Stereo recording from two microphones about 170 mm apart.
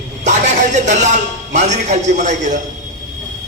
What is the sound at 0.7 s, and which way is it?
A man's voice, 45° right (ahead or behind).